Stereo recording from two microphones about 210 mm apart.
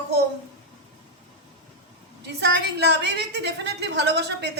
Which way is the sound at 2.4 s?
55° right (ahead or behind).